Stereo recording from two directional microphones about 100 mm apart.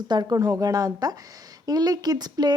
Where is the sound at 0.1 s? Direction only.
40° right (ahead or behind).